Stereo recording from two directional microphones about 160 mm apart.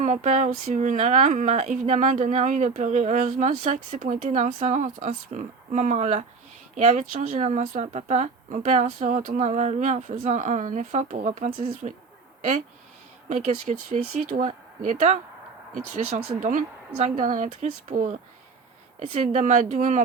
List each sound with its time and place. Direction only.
0.0 s speech: 50° right (ahead or behind)